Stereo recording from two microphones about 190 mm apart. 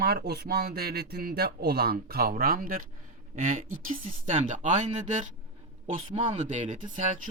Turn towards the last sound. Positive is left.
turn(degrees=-40)  # may be behind; listen again after turning